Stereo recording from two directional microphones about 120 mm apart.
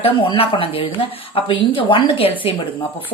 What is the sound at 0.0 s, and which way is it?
Speech, 45° left (ahead or behind).